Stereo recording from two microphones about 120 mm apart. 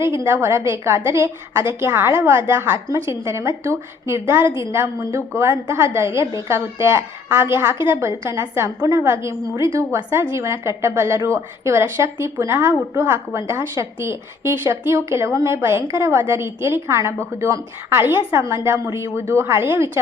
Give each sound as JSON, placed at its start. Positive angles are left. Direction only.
{"t": 0.4, "sound": "a woman's voice", "side_deg": -25}